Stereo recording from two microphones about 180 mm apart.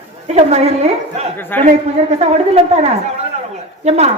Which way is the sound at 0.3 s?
35° right (ahead or behind).